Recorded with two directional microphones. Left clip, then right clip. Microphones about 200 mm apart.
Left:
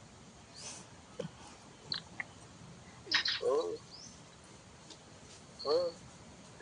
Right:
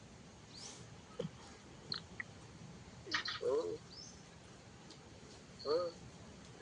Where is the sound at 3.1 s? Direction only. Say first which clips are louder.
Left 6 dB; 25° right (ahead or behind).